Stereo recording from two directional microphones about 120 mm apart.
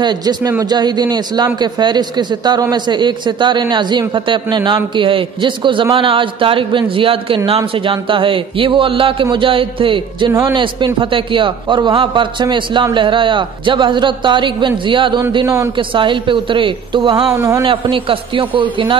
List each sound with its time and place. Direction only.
0.0 s a man's voice: 35° right (ahead or behind)
15.4 s a man's voice: 25° right (ahead or behind)
15.7 s a man's voice: 45° right (ahead or behind)
17.3 s a man's voice: 25° right (ahead or behind)
17.6 s a man's voice: 45° right (ahead or behind)